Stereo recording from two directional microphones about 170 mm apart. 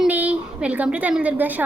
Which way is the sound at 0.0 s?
10° right (ahead or behind).